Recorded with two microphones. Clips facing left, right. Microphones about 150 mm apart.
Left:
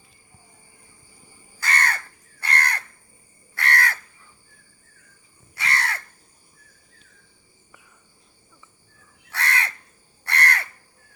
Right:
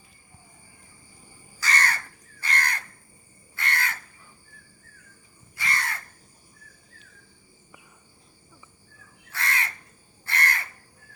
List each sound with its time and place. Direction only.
1.5 s crow: 55° left (ahead or behind)
5.5 s crow: 75° left (ahead or behind)
9.3 s crow: 75° left (ahead or behind)